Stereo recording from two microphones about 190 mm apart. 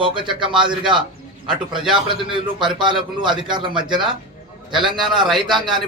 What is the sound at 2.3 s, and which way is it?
Speech, 25° right (ahead or behind).